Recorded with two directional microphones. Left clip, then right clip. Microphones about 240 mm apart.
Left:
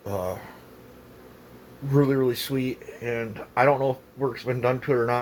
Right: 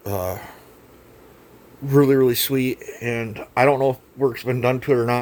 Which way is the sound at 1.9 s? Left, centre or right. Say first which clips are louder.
Right 6 dB; right.